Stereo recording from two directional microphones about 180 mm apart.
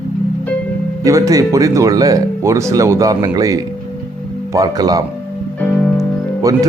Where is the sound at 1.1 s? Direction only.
20° right (ahead or behind).